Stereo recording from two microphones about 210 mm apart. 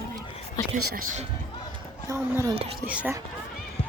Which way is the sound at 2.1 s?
15° right (ahead or behind).